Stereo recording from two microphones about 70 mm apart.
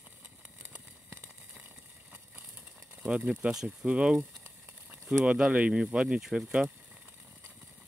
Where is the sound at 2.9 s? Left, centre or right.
Centre.